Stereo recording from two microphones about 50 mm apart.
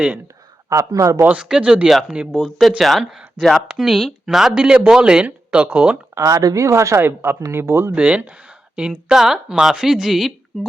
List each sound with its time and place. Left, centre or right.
0.7 s speech: right
1.4 s speech: centre
3.0 s speech: centre; by 6.0 s right
6.1 s a woman's voice: right
7.0 s speech: right
7.5 s speech: right
7.9 s speech: right; by 10.7 s centre